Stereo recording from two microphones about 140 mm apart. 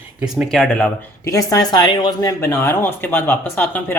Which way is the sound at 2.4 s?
20° left (ahead or behind).